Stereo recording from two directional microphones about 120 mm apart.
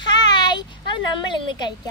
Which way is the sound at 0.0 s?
35° left (ahead or behind).